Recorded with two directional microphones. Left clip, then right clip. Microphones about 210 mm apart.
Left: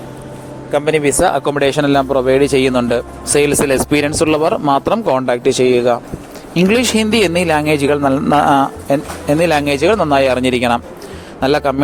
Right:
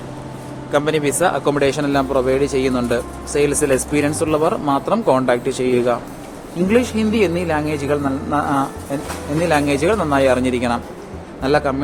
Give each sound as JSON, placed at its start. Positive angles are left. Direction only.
{"t": 0.7, "sound": "a man's voice", "side_deg": 15}
{"t": 1.2, "sound": "speech", "side_deg": 35}
{"t": 6.7, "sound": "a man's voice", "side_deg": 50}